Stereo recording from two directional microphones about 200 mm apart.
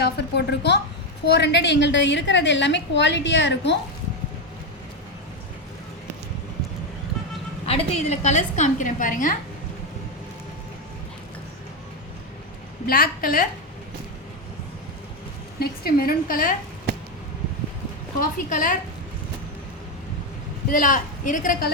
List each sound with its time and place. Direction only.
0.0 s a woman's voice: 55° left (ahead or behind)
7.7 s a woman's voice: 35° left (ahead or behind)
12.9 s speech: 45° left (ahead or behind)
15.5 s speech: 50° left (ahead or behind)
18.2 s speech: 40° left (ahead or behind)
20.7 s speech: 45° left (ahead or behind)